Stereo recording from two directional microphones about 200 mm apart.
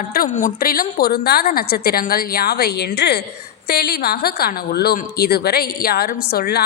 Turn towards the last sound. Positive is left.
turn(degrees=50)  # may be behind; listen again after turning